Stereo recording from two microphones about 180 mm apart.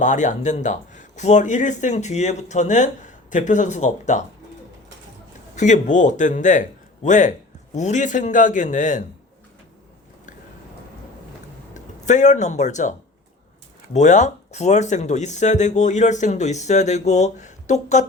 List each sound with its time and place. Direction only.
0.0 s speech: 45° left (ahead or behind)
5.5 s speech: 45° left (ahead or behind)
11.7 s speech: 40° left (ahead or behind)
13.9 s speech: 40° left (ahead or behind)